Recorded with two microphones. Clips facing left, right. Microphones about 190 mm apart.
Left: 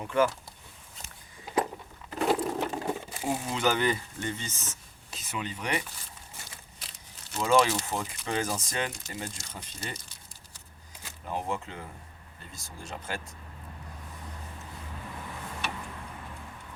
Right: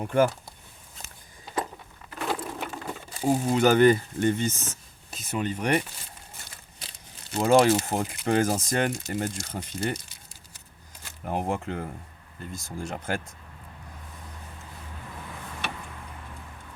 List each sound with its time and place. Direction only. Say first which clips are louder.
0.1 s speech: right 3 dB; 50° right (ahead or behind)
2.0 s sewing machine: left 4 dB; 30° left (ahead or behind)
3.2 s speech: right 7 dB; 40° right (ahead or behind)
7.3 s speech: right 5 dB; 50° right (ahead or behind)
11.3 s speech: right 5 dB; 50° right (ahead or behind)